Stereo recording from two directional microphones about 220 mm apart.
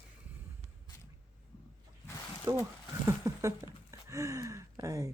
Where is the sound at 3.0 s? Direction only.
15° right (ahead or behind).